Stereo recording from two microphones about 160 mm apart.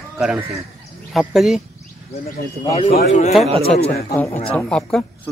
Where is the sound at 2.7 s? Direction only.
40° left (ahead or behind).